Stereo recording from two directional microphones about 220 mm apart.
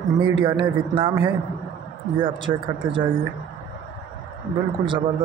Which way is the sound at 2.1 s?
20° right (ahead or behind).